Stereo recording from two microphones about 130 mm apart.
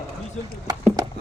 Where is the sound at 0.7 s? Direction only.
30° right (ahead or behind).